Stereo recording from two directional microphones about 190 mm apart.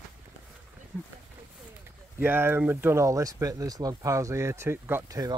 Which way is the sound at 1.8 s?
10° right (ahead or behind).